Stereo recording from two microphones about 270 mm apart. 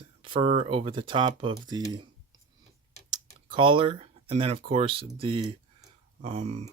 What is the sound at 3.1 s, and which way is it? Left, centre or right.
Speech, centre.